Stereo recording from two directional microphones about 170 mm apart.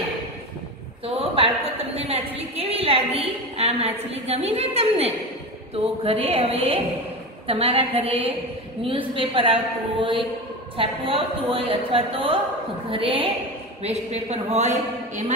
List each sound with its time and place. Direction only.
1.0 s a woman's voice: 35° right (ahead or behind)